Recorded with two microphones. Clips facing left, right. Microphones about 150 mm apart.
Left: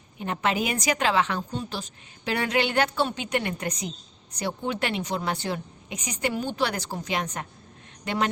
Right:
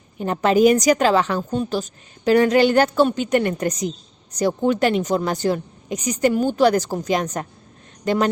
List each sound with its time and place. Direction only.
0.2 s a woman's voice: 40° right (ahead or behind)